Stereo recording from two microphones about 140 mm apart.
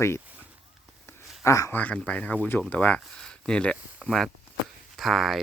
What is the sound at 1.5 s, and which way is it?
Speech, 25° left (ahead or behind).